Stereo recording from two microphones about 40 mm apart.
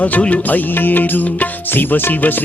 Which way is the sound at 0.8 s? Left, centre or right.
Left.